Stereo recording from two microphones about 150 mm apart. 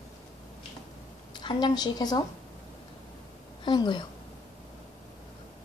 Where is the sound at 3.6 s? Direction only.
30° left (ahead or behind).